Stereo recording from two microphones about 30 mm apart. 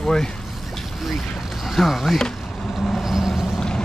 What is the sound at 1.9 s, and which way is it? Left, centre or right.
Speech, centre.